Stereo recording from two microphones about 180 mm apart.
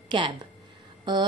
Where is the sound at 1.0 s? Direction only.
25° right (ahead or behind).